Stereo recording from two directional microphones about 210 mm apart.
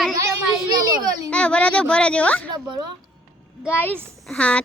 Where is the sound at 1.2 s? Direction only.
5° left (ahead or behind).